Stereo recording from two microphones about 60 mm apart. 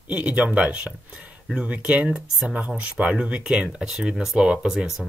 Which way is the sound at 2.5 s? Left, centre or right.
Right.